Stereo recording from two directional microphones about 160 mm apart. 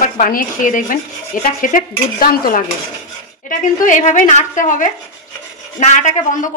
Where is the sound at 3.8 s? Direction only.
50° left (ahead or behind).